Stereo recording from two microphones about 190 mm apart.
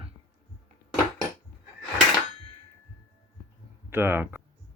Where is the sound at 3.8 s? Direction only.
10° right (ahead or behind).